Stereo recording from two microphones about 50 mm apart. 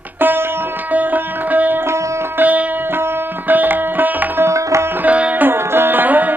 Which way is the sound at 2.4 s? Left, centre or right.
Right.